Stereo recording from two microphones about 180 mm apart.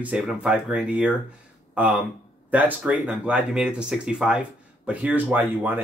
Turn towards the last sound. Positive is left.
turn(degrees=-10)  # may be behind; listen again after turning